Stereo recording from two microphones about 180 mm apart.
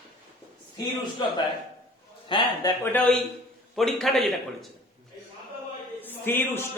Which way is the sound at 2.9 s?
5° left (ahead or behind).